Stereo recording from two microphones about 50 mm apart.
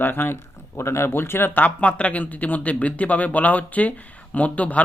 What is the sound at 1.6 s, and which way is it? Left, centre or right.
Speech, left.